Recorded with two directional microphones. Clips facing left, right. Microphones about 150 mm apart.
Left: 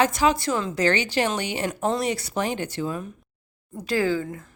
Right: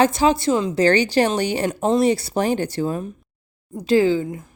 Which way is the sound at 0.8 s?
35° right (ahead or behind).